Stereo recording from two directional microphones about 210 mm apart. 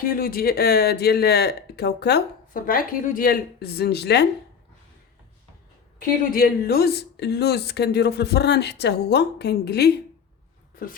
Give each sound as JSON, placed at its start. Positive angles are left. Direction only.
{"t": 0.0, "sound": "speech", "side_deg": 45}
{"t": 6.0, "sound": "speech", "side_deg": 45}